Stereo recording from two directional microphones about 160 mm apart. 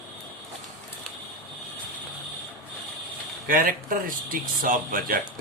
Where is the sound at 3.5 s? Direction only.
60° right (ahead or behind).